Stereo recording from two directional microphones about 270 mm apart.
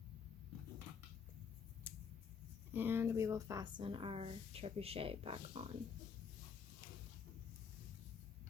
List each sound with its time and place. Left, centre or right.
1.9 s scissors: centre
2.7 s speech: centre